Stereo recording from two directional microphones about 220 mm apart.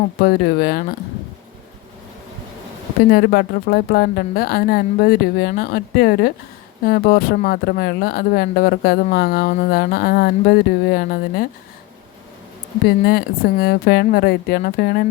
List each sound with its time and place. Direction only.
0.2 s speech: 45° left (ahead or behind)
3.1 s speech: 45° left (ahead or behind)
13.1 s speech: 45° left (ahead or behind)